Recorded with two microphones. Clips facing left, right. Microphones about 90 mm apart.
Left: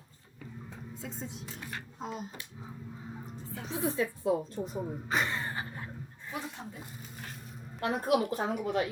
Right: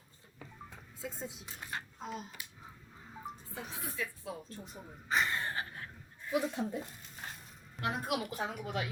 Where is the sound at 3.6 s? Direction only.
20° left (ahead or behind).